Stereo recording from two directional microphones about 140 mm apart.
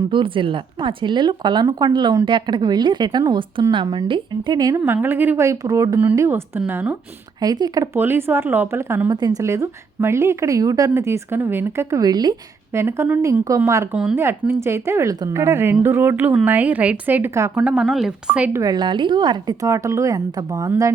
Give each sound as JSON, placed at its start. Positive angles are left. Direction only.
{"t": 0.1, "sound": "a woman's voice", "side_deg": -35}
{"t": 4.8, "sound": "a woman's voice", "side_deg": -10}
{"t": 6.0, "sound": "a woman's voice", "side_deg": -15}
{"t": 7.4, "sound": "speech", "side_deg": -25}
{"t": 7.9, "sound": "speech", "side_deg": -15}
{"t": 13.9, "sound": "speech", "side_deg": -5}
{"t": 14.2, "sound": "a woman's voice", "side_deg": -15}
{"t": 18.6, "sound": "speech", "side_deg": -30}